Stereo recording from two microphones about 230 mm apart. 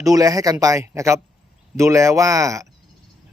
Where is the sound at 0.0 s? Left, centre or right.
Centre.